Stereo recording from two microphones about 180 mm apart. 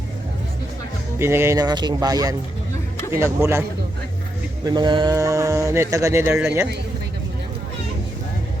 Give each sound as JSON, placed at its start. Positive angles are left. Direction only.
{"t": 1.2, "sound": "speech", "side_deg": -15}
{"t": 4.6, "sound": "speech", "side_deg": -25}